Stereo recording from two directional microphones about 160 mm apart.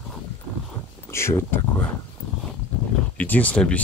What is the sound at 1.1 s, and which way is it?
Speech, 15° left (ahead or behind).